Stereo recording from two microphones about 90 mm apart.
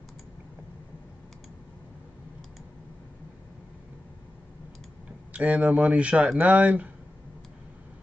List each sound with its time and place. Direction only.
5.3 s speech: 15° right (ahead or behind)